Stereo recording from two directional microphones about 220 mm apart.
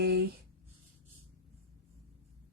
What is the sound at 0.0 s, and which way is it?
Speech, 45° right (ahead or behind).